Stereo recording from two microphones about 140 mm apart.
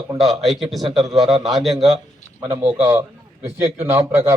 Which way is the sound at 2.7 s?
10° right (ahead or behind).